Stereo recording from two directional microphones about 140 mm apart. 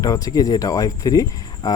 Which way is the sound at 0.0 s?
25° left (ahead or behind).